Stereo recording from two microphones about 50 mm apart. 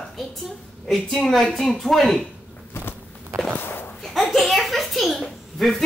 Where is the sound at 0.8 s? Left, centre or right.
Centre.